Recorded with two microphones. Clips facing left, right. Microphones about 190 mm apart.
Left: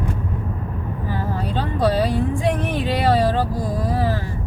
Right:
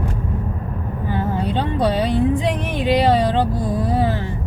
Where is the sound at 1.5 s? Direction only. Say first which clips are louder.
Left 1 dB; 20° right (ahead or behind).